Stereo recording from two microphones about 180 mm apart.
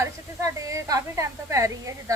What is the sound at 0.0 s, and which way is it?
A woman's voice, 15° right (ahead or behind).